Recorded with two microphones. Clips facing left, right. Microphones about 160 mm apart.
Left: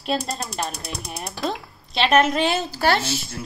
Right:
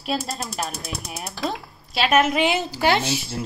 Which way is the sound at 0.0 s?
Centre (ahead or behind).